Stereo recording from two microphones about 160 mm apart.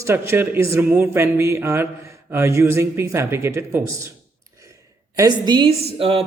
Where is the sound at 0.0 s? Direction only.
15° right (ahead or behind).